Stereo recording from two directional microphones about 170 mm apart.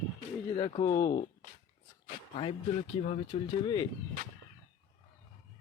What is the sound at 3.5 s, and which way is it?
Speech, 25° left (ahead or behind).